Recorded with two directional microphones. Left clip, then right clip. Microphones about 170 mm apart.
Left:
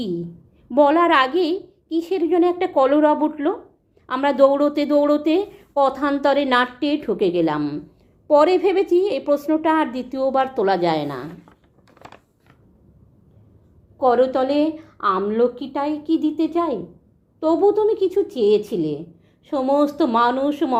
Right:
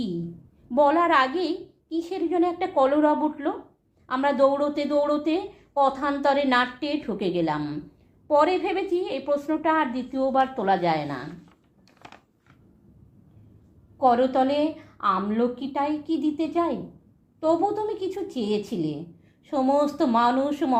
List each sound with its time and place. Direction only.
0.7 s a woman's voice: 40° left (ahead or behind)
14.0 s a woman's voice: 35° left (ahead or behind)